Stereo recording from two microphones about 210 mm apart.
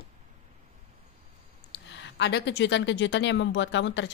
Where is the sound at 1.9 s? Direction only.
55° left (ahead or behind).